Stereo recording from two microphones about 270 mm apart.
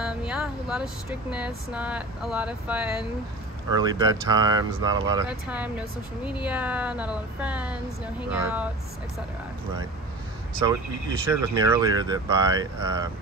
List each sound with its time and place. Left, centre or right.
0.0 s vehicle: centre
1.3 s a woman's voice: centre
3.7 s speech: centre
5.3 s a woman's voice: centre
10.7 s speech: centre